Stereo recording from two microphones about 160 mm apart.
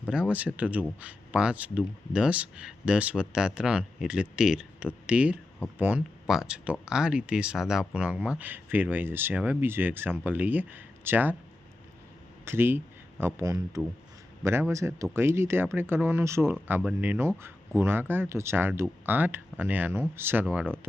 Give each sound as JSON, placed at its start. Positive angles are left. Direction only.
{"t": 0.0, "sound": "speech", "side_deg": -10}
{"t": 12.5, "sound": "speech", "side_deg": -15}